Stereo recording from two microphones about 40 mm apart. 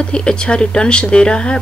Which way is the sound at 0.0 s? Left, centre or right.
Left.